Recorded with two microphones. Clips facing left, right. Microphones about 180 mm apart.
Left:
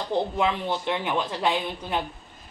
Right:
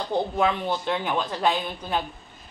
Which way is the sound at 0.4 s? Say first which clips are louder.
Right 1 dB; 20° left (ahead or behind).